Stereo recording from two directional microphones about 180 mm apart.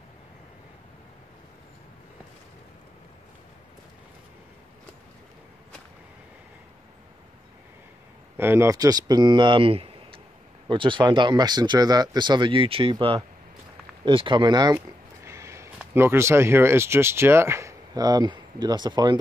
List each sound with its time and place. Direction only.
8.4 s speech: 15° right (ahead or behind)